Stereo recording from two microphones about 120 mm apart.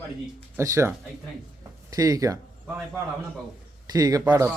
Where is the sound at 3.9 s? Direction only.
30° right (ahead or behind).